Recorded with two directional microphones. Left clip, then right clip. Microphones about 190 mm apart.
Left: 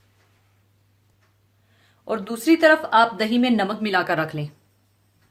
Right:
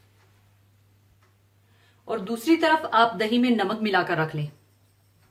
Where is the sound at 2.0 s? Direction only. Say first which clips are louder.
Left 3 dB; 50° left (ahead or behind).